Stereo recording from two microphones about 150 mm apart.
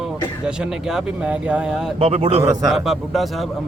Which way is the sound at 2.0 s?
40° right (ahead or behind).